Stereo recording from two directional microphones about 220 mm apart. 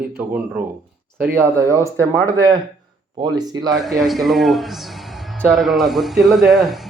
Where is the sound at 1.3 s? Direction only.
15° right (ahead or behind).